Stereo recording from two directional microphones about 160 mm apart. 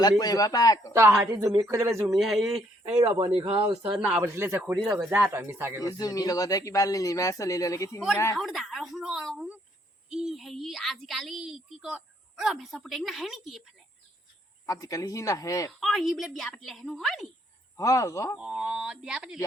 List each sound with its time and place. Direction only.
0.0 s speech: 25° left (ahead or behind)
0.9 s speech: 15° right (ahead or behind)
2.2 s a woman's voice: centre (ahead or behind)
3.2 s speech: 30° right (ahead or behind)
3.9 s a woman's voice: 10° right (ahead or behind)
5.3 s speech: 15° right (ahead or behind)
5.9 s speech: 25° left (ahead or behind)
8.4 s a woman's voice: centre (ahead or behind)
14.7 s speech: 20° left (ahead or behind)
15.8 s a woman's voice: centre (ahead or behind)
17.7 s speech: 20° left (ahead or behind)
18.3 s a woman's voice: 5° right (ahead or behind)